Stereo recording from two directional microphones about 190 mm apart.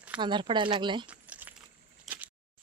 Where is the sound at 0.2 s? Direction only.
25° right (ahead or behind).